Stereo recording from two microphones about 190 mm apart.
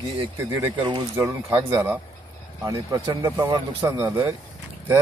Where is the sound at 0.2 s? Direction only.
15° right (ahead or behind).